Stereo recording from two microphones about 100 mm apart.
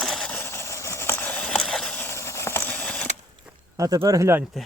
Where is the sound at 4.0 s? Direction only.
40° right (ahead or behind).